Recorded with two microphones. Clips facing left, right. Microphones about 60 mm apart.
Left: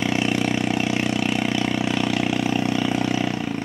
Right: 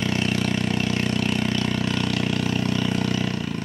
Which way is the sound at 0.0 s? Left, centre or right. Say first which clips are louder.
Left 2 dB; centre.